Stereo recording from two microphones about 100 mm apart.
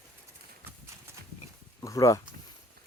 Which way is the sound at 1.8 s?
30° left (ahead or behind).